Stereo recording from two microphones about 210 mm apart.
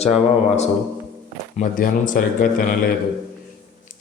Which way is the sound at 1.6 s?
40° left (ahead or behind).